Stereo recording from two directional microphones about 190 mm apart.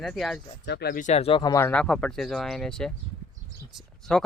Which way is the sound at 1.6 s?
5° left (ahead or behind).